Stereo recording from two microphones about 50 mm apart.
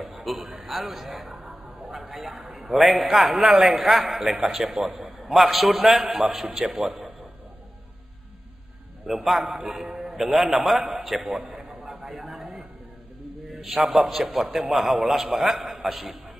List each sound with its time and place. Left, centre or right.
0.0 s a sound: centre
0.7 s a man's voice: centre
3.4 s a man's voice: right
3.9 s a man's voice: centre
9.0 s a man's voice: centre
11.7 s a sound: centre
13.6 s a man's voice: centre